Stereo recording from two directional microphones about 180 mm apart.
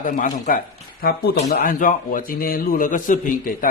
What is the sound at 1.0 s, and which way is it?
Speech, 60° left (ahead or behind).